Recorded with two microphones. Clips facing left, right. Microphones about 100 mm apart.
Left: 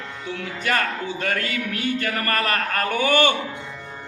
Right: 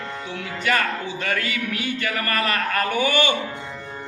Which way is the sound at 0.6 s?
40° left (ahead or behind).